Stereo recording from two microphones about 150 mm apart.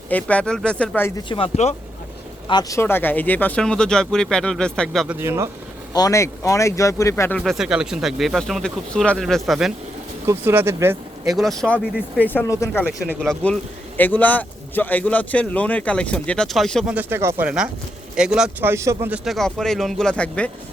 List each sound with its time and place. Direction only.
0.1 s speech: 10° left (ahead or behind)
1.1 s speech: 30° left (ahead or behind)
2.5 s speech: 25° left (ahead or behind); by 5.0 s 5° left (ahead or behind)
5.0 s speech: 15° right (ahead or behind)
5.9 s speech: 25° left (ahead or behind)
7.3 s speech: centre (ahead or behind)
10.2 s speech: 15° right (ahead or behind)
11.3 s speech: centre (ahead or behind)
16.9 s speech: 15° right (ahead or behind)
18.7 s speech: 20° right (ahead or behind)
19.1 s speech: centre (ahead or behind)